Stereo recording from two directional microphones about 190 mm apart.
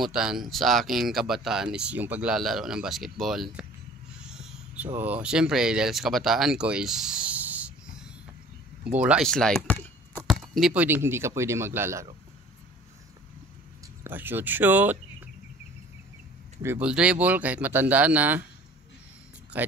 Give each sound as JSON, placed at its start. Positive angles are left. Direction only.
{"t": 0.0, "sound": "speech", "side_deg": -5}
{"t": 4.2, "sound": "a sound", "side_deg": -5}
{"t": 4.9, "sound": "speech", "side_deg": -10}
{"t": 14.0, "sound": "speech", "side_deg": -10}
{"t": 16.6, "sound": "speech", "side_deg": -5}
{"t": 19.5, "sound": "speech", "side_deg": -10}